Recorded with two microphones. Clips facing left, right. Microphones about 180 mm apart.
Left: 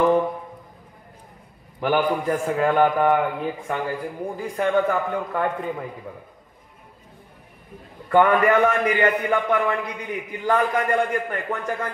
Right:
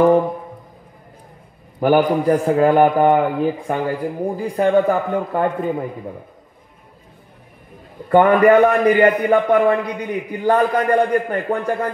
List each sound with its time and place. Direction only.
1.8 s a man's voice: 40° right (ahead or behind)
8.1 s a man's voice: 35° right (ahead or behind)